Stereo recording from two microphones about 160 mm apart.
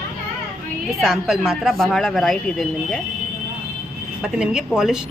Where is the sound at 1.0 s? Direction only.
5° right (ahead or behind).